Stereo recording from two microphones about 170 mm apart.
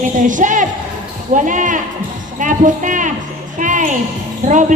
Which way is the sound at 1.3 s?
50° right (ahead or behind).